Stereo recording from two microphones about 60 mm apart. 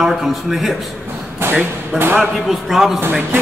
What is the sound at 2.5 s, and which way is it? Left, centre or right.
Speech, centre.